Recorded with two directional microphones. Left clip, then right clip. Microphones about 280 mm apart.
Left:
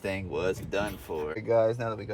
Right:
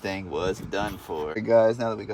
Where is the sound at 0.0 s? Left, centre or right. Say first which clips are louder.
Right 2 dB; right.